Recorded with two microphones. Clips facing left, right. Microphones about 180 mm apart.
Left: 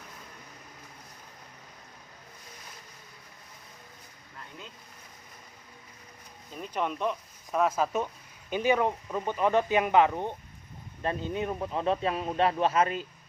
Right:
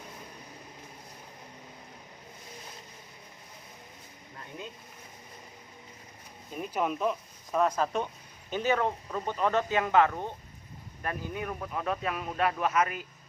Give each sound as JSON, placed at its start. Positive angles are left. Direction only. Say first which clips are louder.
{"t": 6.6, "sound": "speech", "louder": "right 1 dB", "side_deg": -5}